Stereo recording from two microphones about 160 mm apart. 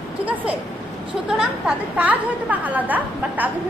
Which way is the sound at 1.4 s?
5° right (ahead or behind).